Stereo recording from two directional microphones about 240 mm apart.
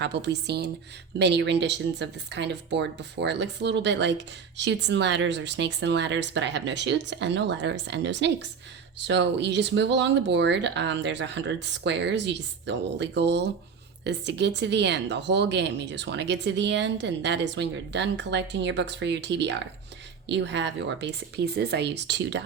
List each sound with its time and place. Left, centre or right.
0.0 s speech: right